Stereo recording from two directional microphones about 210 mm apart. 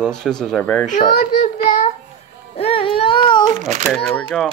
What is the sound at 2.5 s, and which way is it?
Baby cry, 25° left (ahead or behind).